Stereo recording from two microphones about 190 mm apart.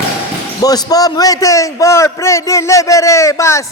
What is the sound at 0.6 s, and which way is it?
A man's voice, 20° left (ahead or behind).